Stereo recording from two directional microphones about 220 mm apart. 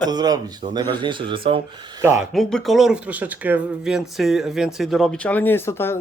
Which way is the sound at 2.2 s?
Centre (ahead or behind).